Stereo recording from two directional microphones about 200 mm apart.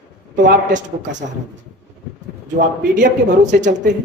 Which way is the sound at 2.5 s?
40° right (ahead or behind).